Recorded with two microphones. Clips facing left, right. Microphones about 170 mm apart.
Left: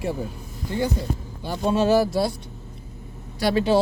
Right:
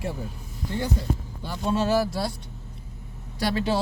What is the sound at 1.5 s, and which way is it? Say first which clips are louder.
Speech: left 4 dB; 20° left (ahead or behind).